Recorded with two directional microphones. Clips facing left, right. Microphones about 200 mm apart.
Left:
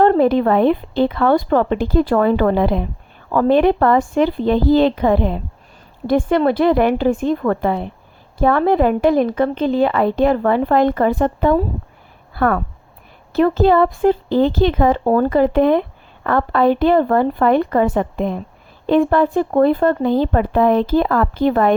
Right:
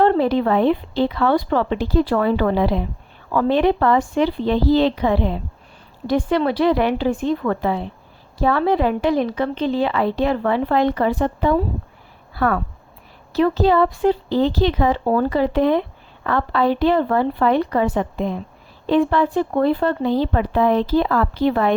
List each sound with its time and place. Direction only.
0.0 s a woman's voice: 50° left (ahead or behind)